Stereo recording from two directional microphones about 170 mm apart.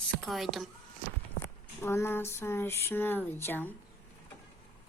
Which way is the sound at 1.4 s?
15° left (ahead or behind).